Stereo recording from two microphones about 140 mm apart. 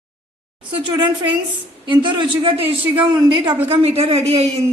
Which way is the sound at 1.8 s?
35° right (ahead or behind).